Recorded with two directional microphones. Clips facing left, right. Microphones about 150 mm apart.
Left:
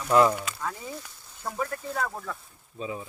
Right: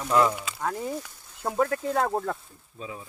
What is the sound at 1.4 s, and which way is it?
Speech, 65° right (ahead or behind).